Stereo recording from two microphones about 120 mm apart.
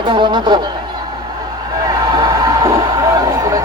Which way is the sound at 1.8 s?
30° right (ahead or behind).